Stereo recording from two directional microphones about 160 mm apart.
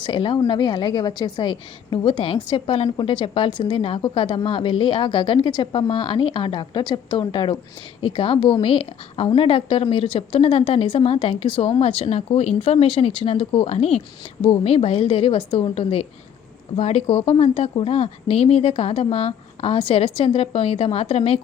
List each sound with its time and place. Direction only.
0.0 s a woman's voice: 30° left (ahead or behind)